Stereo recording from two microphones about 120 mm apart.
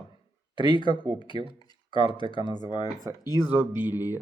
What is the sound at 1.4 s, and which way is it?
Speech, 45° right (ahead or behind).